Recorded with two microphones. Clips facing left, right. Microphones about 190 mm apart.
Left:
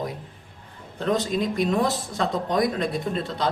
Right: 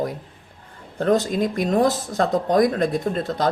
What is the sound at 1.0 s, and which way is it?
Speech, 45° right (ahead or behind).